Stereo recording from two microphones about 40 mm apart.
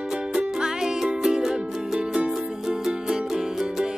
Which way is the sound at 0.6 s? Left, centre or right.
Centre.